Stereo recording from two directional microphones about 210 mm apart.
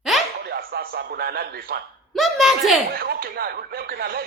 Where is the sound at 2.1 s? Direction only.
Centre (ahead or behind).